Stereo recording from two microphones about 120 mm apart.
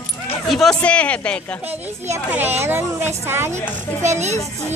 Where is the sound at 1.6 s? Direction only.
15° right (ahead or behind).